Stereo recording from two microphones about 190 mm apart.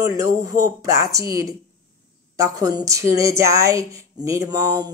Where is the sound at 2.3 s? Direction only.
15° right (ahead or behind).